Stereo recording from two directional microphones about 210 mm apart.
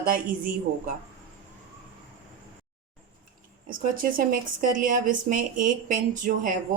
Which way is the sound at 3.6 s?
40° right (ahead or behind).